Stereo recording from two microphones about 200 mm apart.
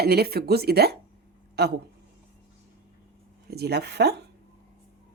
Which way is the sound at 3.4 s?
55° right (ahead or behind).